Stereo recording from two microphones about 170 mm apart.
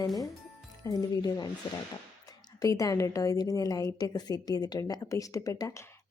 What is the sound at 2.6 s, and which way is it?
A woman's voice, 20° left (ahead or behind).